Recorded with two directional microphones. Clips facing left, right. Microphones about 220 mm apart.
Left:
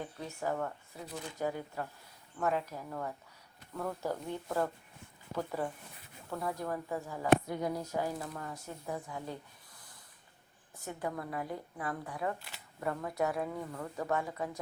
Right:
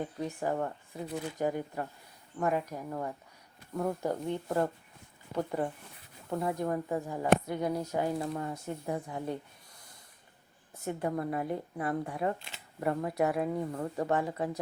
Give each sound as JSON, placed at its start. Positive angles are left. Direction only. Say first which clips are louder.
{"t": 0.0, "sound": "speech", "louder": "right 4 dB", "side_deg": -15}
{"t": 10.8, "sound": "speech", "louder": "right 6 dB", "side_deg": -25}